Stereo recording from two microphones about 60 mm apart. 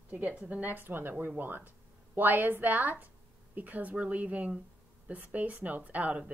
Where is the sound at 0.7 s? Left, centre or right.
Right.